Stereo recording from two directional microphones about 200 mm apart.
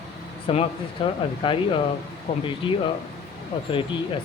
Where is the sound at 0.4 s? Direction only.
30° left (ahead or behind).